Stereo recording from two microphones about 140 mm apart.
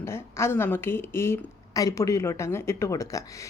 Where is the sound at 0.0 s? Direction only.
20° left (ahead or behind).